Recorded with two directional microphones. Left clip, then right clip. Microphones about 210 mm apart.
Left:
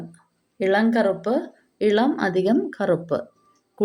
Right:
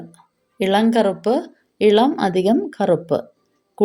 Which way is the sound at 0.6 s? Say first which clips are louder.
Right 3 dB; 35° right (ahead or behind).